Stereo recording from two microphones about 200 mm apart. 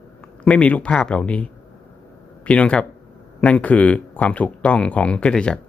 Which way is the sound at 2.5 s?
5° left (ahead or behind).